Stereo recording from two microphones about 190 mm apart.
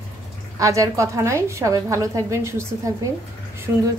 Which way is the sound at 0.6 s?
15° right (ahead or behind).